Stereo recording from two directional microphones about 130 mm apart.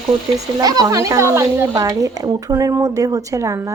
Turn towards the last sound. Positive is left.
turn(degrees=-25)  # may be behind; listen again after turning